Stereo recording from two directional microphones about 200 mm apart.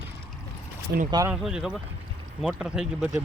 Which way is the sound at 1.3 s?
5° right (ahead or behind).